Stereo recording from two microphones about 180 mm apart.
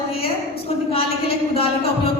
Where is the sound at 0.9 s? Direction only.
30° left (ahead or behind).